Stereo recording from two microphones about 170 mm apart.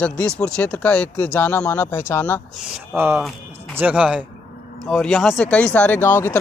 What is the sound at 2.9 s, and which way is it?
Speech, 10° right (ahead or behind).